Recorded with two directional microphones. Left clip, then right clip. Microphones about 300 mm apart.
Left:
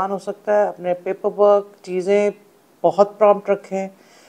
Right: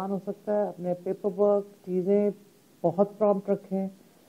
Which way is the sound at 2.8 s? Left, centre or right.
Left.